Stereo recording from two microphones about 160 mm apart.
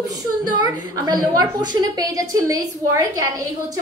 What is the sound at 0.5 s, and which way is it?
A woman's voice, 25° right (ahead or behind).